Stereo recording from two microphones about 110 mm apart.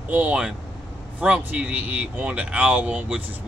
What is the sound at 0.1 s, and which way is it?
Speech, 10° right (ahead or behind).